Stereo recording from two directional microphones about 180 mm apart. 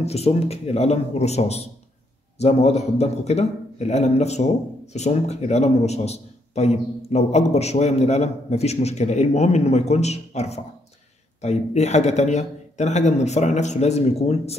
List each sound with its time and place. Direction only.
0.0 s a man's voice: 35° left (ahead or behind)